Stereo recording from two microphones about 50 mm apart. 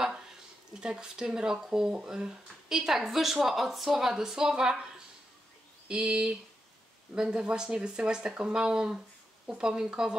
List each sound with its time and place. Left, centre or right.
0.7 s speech: centre
5.9 s speech: centre